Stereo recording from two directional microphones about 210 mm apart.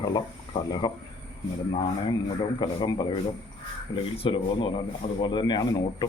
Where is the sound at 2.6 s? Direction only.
20° left (ahead or behind).